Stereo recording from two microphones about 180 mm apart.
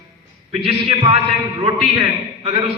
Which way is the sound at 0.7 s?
35° right (ahead or behind).